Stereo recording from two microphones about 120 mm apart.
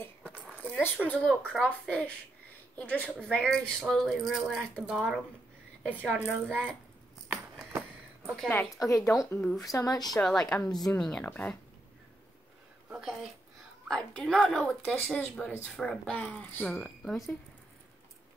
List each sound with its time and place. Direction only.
0.4 s a sound: 10° left (ahead or behind)
1.0 s speech: 10° left (ahead or behind)
5.9 s a woman's voice: 10° right (ahead or behind)
8.2 s a woman's voice: centre (ahead or behind)
8.7 s speech: 25° left (ahead or behind)
10.1 s speech: 5° left (ahead or behind)
12.9 s speech: 5° right (ahead or behind)